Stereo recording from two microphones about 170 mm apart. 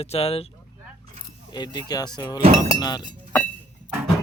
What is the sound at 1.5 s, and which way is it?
Speech, 25° left (ahead or behind).